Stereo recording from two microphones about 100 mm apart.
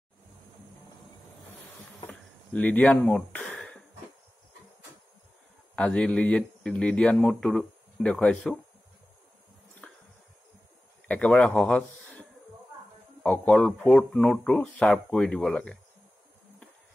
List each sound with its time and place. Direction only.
2.0 s a sound: 15° left (ahead or behind)
5.8 s a man's voice: 10° left (ahead or behind)
11.1 s a man's voice: 15° left (ahead or behind)